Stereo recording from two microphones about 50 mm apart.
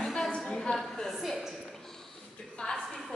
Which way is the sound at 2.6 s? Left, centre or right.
Left.